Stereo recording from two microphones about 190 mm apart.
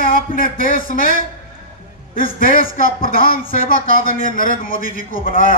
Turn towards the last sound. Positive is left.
turn(degrees=45)  # may be behind; listen again after turning